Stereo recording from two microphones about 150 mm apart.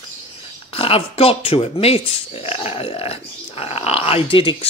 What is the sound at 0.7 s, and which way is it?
Speech, 40° left (ahead or behind).